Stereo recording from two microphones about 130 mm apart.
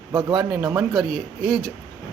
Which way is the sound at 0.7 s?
Centre (ahead or behind).